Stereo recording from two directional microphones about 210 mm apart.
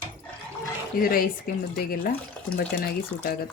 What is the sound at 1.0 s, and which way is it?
Speech, 45° left (ahead or behind).